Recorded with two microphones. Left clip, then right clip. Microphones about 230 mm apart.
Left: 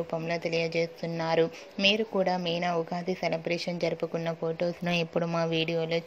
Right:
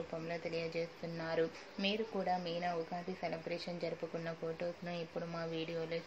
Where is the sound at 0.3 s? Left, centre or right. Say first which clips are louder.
Left 11 dB; left.